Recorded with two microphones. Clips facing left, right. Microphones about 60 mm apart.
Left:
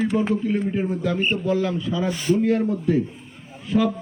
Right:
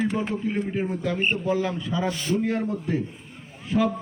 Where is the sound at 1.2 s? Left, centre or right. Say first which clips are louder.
Left 1 dB; right.